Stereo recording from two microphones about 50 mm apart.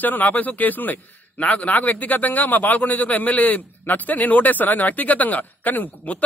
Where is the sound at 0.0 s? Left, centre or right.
Left.